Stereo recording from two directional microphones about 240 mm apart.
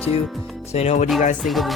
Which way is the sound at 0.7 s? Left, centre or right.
Left.